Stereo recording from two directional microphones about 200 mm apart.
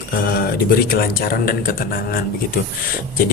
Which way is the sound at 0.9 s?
45° left (ahead or behind).